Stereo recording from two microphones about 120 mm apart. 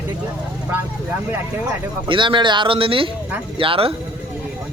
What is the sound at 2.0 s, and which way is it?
Speech, 45° right (ahead or behind).